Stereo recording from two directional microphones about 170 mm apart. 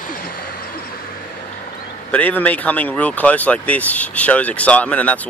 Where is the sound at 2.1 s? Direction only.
10° left (ahead or behind).